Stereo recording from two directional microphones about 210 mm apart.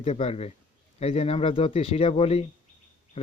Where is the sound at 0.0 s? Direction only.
30° left (ahead or behind).